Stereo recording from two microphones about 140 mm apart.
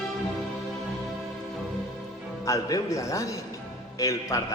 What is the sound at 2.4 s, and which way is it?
A man's voice, 25° left (ahead or behind).